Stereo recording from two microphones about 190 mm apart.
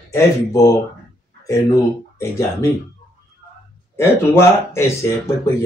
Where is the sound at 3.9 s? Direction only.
10° left (ahead or behind).